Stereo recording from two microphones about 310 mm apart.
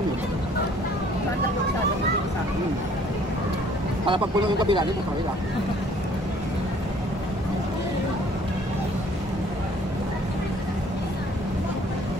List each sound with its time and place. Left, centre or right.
4.0 s speech: centre